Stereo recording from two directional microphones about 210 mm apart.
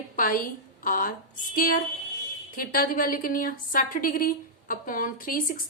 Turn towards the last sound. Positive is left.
turn(degrees=40)  # may be behind; listen again after turning